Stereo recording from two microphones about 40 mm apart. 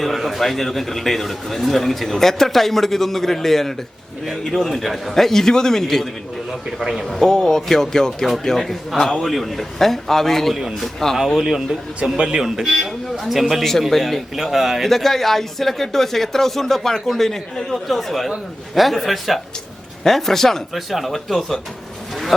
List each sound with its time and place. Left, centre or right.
0.0 s a man's voice: centre
6.5 s a man's voice: centre
7.3 s speech: centre
11.3 s speech: centre
12.0 s a man's voice: right
12.6 s a man's voice: centre
14.3 s speech: centre
14.8 s a man's voice: centre
20.7 s a man's voice: centre